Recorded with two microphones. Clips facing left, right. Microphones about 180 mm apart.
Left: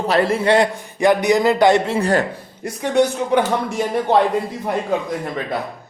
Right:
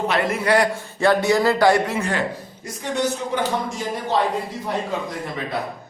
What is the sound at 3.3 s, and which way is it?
Speech, 65° left (ahead or behind).